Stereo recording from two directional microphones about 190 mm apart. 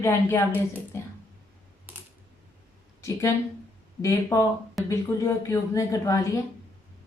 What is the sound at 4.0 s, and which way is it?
A woman's voice, 15° left (ahead or behind).